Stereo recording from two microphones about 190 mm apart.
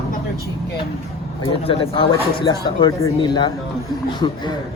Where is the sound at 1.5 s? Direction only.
30° left (ahead or behind).